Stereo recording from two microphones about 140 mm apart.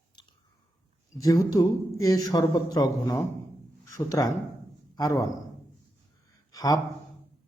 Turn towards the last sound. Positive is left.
turn(degrees=25)  # may be behind; listen again after turning